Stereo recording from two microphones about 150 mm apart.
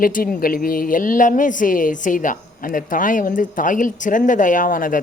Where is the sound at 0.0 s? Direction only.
70° left (ahead or behind).